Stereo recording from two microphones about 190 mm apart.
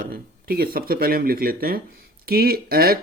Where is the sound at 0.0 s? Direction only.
50° right (ahead or behind).